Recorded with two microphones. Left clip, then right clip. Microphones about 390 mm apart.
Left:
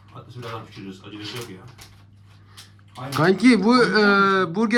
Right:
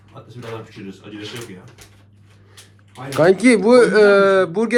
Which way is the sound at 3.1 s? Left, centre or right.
Centre.